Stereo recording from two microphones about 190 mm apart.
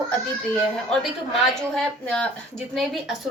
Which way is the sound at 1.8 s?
5° left (ahead or behind).